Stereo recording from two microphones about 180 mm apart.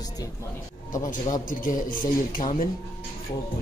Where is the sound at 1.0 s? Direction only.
45° left (ahead or behind).